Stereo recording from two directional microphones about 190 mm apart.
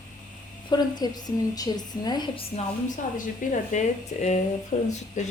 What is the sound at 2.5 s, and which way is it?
A woman's voice, 35° left (ahead or behind).